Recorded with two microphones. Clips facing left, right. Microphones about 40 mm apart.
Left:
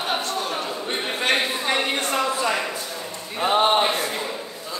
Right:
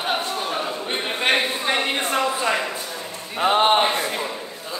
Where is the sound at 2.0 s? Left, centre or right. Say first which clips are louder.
Right 1 dB; right.